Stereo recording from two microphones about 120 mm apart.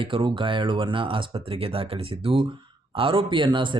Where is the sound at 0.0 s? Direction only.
45° right (ahead or behind).